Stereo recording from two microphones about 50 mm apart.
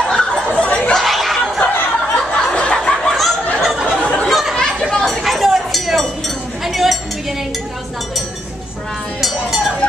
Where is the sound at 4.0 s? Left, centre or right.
Left.